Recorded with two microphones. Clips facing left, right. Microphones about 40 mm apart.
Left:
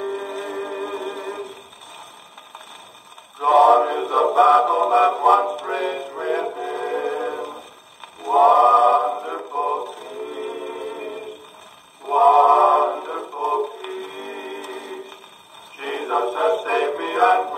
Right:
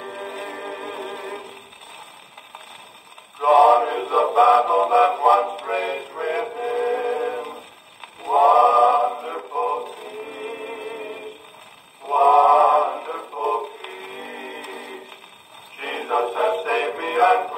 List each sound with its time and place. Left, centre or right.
0.0 s music: centre
3.3 s male singing: right
4.0 s music: centre
5.4 s music: centre
5.8 s synthetic singing: centre
6.6 s music: centre
8.2 s choir: centre
9.5 s a sound: centre
10.1 s music: centre
12.2 s synthetic singing: right; by 13.4 s centre
13.7 s music: centre
15.8 s synthetic singing: centre
16.7 s music: centre
17.0 s synthetic singing: right